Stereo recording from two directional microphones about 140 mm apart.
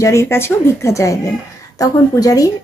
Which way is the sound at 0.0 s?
20° left (ahead or behind).